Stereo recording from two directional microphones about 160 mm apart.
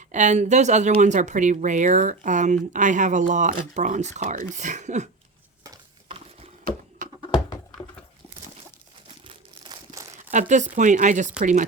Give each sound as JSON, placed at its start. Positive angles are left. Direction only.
{"t": 0.1, "sound": "speech", "side_deg": -50}
{"t": 6.1, "sound": "a sound", "side_deg": -40}
{"t": 9.0, "sound": "crumpling", "side_deg": -30}
{"t": 10.3, "sound": "speech", "side_deg": -50}